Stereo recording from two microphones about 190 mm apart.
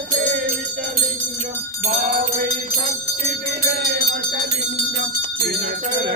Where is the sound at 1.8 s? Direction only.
40° right (ahead or behind).